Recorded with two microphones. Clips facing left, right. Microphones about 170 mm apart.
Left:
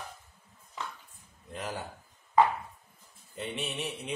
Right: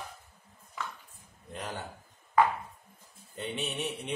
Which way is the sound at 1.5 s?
Centre (ahead or behind).